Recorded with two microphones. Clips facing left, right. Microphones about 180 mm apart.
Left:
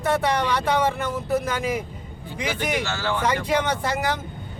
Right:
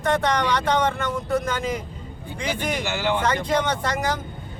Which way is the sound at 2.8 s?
15° right (ahead or behind).